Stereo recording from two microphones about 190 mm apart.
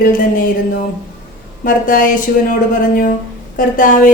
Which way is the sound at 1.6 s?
45° left (ahead or behind).